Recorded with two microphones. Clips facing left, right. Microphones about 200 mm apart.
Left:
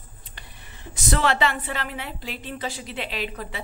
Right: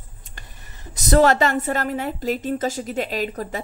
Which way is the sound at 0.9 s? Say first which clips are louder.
Right 8 dB; 40° right (ahead or behind).